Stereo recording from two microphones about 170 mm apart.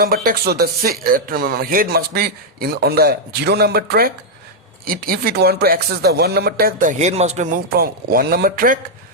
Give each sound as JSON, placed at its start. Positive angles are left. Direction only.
{"t": 0.0, "sound": "speech", "side_deg": -60}